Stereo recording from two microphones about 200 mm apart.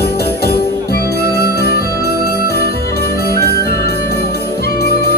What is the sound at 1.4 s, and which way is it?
Music, 50° left (ahead or behind).